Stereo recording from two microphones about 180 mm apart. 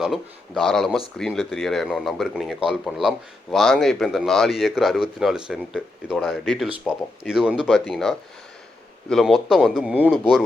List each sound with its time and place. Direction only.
0.0 s speech: centre (ahead or behind)